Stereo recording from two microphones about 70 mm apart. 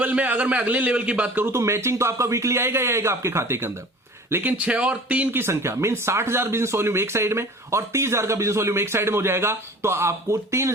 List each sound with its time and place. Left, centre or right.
0.0 s a man's voice: right
1.5 s speech: right
4.5 s speech: centre
5.4 s speech: right